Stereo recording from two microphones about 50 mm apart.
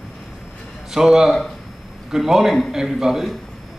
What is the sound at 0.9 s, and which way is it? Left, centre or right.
Speech, centre.